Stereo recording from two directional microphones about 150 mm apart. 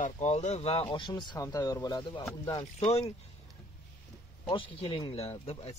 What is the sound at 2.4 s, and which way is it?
Speech, 35° left (ahead or behind).